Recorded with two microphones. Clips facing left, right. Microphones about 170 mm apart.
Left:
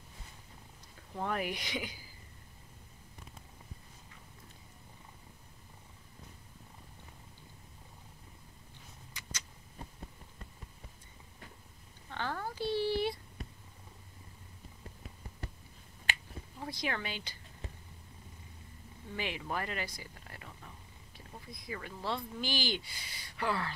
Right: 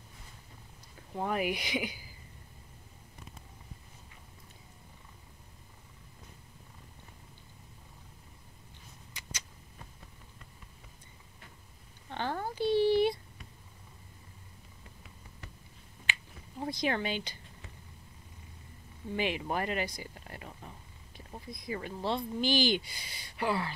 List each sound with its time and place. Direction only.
1.1 s speech: 10° right (ahead or behind)
12.1 s a sound: 20° right (ahead or behind)
16.5 s speech: 20° right (ahead or behind)
19.1 s speech: 20° right (ahead or behind)